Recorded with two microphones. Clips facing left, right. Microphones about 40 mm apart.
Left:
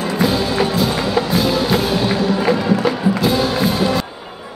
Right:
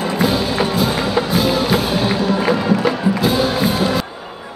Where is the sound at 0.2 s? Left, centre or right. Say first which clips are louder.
Left 1 dB; centre.